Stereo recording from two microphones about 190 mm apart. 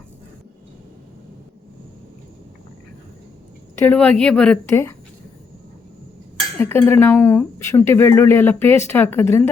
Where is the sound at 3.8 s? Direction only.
10° left (ahead or behind).